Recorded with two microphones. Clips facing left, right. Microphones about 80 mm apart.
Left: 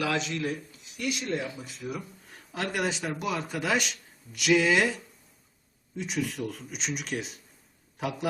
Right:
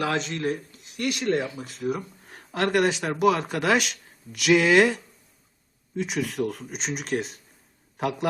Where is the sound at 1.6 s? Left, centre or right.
Right.